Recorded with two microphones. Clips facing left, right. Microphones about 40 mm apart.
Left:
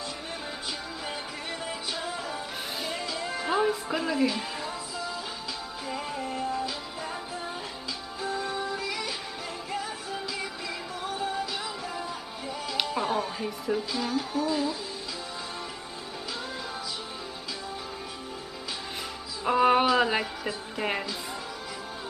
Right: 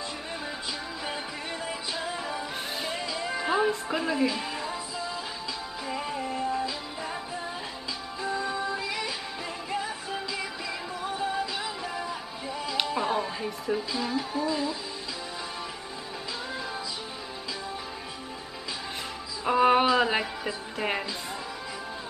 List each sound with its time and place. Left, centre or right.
2.0 s music: centre
3.1 s music: right
3.5 s speech: centre
5.9 s music: centre
6.2 s music: right
8.8 s music: right
11.1 s music: centre
19.4 s speech: centre